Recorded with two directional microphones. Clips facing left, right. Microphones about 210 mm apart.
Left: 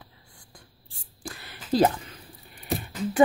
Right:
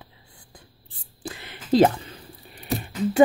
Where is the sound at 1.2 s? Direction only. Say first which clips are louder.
Right 4 dB; 20° right (ahead or behind).